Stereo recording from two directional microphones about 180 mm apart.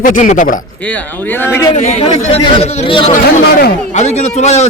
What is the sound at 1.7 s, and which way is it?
Speech, 30° left (ahead or behind).